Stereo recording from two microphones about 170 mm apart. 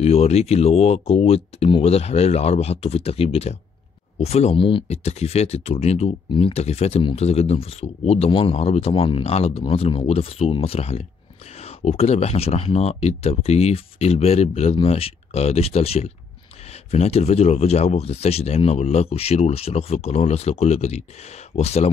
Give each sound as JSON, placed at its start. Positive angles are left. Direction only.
{"t": 0.0, "sound": "speech", "side_deg": 40}